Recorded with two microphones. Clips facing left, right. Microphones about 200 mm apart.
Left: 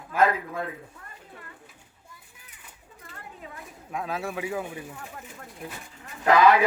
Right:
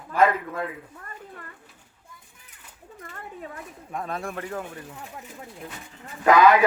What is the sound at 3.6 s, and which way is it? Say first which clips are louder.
A man's voice: left 3 dB; centre (ahead or behind).